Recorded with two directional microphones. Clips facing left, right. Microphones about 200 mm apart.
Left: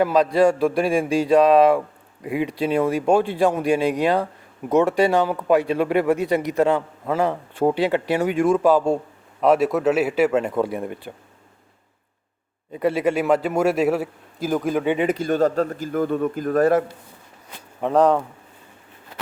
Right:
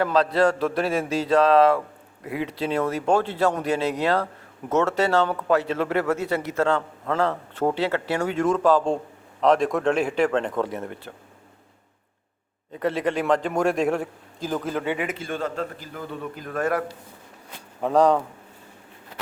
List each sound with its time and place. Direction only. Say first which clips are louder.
0.0 s speech: left 3 dB; 10° left (ahead or behind)
12.7 s speech: left 4 dB; 10° left (ahead or behind)
14.9 s a man's voice: left 9 dB; 35° left (ahead or behind)
17.7 s speech: left 1 dB; 5° left (ahead or behind)